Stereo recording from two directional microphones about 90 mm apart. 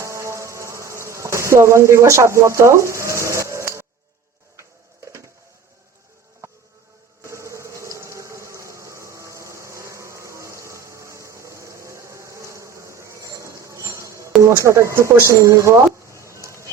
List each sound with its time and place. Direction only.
0.0 s cricket: 35° right (ahead or behind)
7.2 s a sound: 35° right (ahead or behind)
14.6 s speech: 35° right (ahead or behind)